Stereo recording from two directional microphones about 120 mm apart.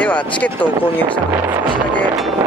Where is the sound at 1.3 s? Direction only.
20° right (ahead or behind).